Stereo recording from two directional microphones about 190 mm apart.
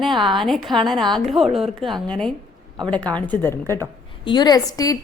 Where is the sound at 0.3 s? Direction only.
Centre (ahead or behind).